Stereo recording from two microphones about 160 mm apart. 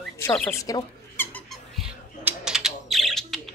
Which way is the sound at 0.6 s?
20° left (ahead or behind).